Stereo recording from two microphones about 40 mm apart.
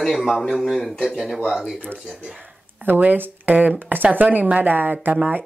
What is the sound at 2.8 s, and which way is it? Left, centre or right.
Speech, right.